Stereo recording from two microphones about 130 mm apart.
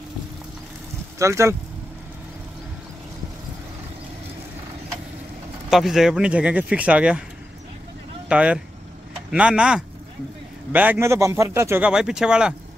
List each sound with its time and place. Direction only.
1.2 s a man's voice: 20° right (ahead or behind)
5.7 s speech: 5° right (ahead or behind)
8.3 s a man's voice: 10° right (ahead or behind)
11.8 s speech: 5° right (ahead or behind)